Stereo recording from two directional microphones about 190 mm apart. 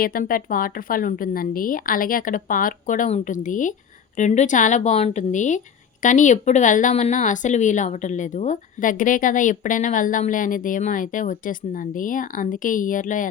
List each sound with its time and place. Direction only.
0.0 s speech: 50° left (ahead or behind)